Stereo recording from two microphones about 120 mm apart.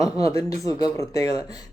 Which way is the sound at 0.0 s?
30° left (ahead or behind).